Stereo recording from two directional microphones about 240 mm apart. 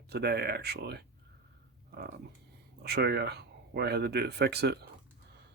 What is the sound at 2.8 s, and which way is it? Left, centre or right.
Speech, right.